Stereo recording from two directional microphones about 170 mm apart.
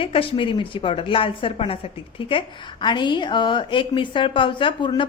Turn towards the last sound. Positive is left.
turn(degrees=30)  # may be behind; listen again after turning